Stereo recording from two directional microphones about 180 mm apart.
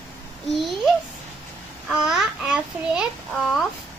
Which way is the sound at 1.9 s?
Centre (ahead or behind).